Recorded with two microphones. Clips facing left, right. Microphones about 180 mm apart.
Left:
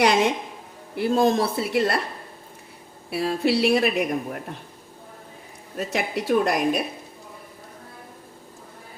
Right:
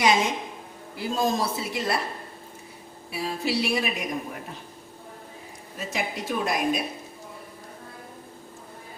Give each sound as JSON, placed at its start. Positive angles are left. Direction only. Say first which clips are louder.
{"t": 0.0, "sound": "speech", "louder": "left 3 dB", "side_deg": 65}
{"t": 3.1, "sound": "speech", "louder": "left 6 dB", "side_deg": 65}
{"t": 5.7, "sound": "speech", "louder": "left 5 dB", "side_deg": 65}